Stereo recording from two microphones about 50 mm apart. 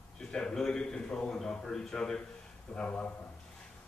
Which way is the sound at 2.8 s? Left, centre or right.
Left.